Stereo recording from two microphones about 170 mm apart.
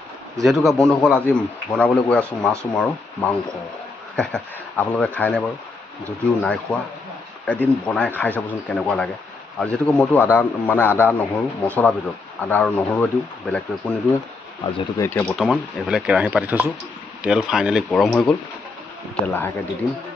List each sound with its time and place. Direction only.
0.4 s a man's voice: centre (ahead or behind)
14.6 s speech: 25° left (ahead or behind)
15.0 s a man's voice: 10° left (ahead or behind)
15.4 s speech: 5° right (ahead or behind)